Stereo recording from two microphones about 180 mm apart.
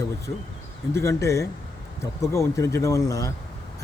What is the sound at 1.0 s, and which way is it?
Speech, 15° left (ahead or behind).